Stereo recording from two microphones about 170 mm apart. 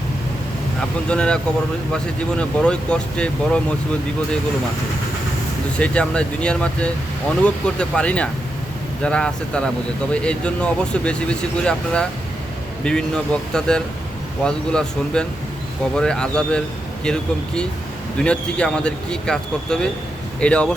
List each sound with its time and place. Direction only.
1.0 s speech: 5° left (ahead or behind)
2.4 s speech: 5° left (ahead or behind)
5.8 s speech: 5° left (ahead or behind)